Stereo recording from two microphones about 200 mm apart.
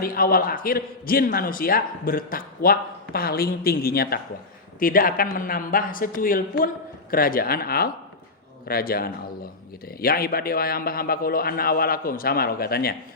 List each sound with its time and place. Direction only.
0.0 s speech: 45° left (ahead or behind)